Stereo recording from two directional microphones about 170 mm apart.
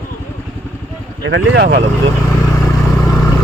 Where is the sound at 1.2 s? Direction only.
85° right.